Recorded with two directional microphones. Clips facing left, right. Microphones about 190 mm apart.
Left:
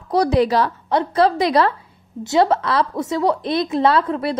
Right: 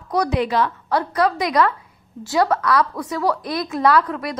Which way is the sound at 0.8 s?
25° left (ahead or behind).